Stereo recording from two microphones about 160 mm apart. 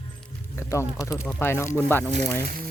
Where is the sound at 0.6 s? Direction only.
20° left (ahead or behind).